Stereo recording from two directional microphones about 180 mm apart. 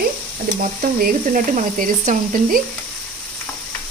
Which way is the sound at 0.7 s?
45° right (ahead or behind).